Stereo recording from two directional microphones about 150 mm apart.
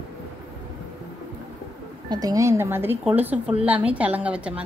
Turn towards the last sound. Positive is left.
turn(degrees=-10)  # may be behind; listen again after turning